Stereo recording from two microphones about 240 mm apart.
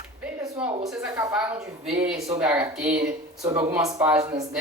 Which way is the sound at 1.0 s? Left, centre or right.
Centre.